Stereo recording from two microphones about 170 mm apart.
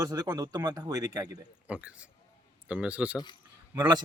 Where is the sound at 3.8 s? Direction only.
25° right (ahead or behind).